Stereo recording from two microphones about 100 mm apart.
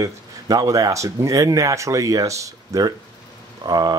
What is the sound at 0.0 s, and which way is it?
Speech, 40° right (ahead or behind).